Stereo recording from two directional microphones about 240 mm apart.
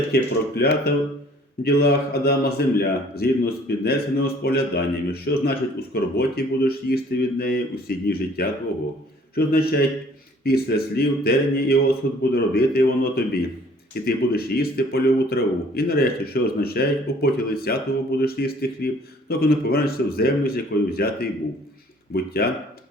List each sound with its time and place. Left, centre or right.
0.1 s speech: left